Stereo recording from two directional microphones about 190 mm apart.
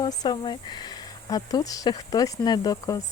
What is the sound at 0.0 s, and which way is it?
Speech, 20° left (ahead or behind).